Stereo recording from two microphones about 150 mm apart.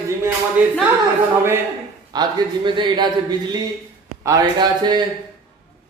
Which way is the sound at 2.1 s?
30° right (ahead or behind).